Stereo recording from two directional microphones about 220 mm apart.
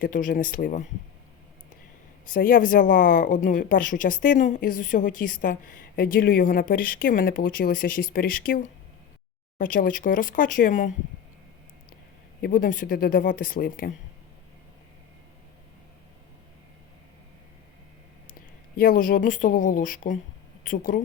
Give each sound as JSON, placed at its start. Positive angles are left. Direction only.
{"t": 0.0, "sound": "speech", "side_deg": 35}
{"t": 2.2, "sound": "speech", "side_deg": 40}
{"t": 12.4, "sound": "speech", "side_deg": 40}
{"t": 18.8, "sound": "speech", "side_deg": 40}